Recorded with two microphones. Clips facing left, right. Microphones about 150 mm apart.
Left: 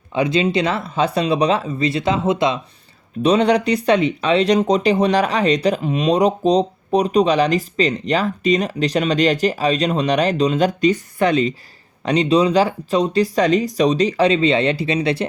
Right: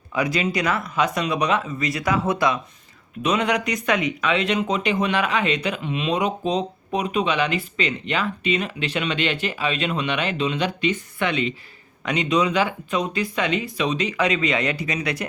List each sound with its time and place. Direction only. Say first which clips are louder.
0.1 s speech: left 5 dB; 25° left (ahead or behind)